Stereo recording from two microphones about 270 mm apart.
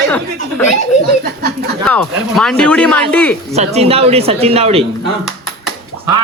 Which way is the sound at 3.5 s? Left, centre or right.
Right.